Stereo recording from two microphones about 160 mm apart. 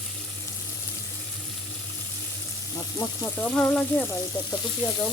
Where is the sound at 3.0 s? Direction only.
20° left (ahead or behind).